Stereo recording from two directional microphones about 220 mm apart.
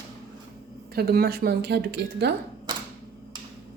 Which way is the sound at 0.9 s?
45° right (ahead or behind).